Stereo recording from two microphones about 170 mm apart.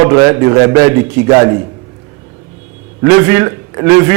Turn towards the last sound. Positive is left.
turn(degrees=-15)  # may be behind; listen again after turning